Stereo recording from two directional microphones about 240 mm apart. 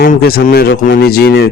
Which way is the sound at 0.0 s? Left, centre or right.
Left.